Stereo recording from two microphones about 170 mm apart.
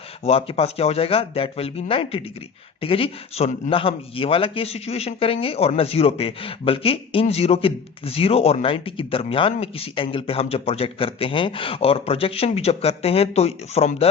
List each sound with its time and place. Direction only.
0.3 s a man's voice: 35° left (ahead or behind)